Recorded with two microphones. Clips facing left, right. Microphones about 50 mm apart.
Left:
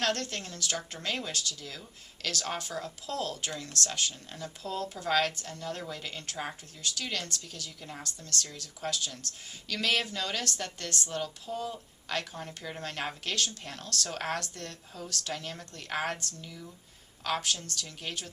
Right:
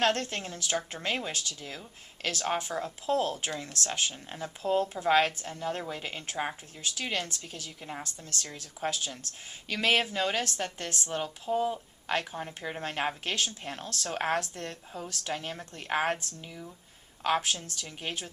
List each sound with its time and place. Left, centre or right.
0.0 s a woman's voice: right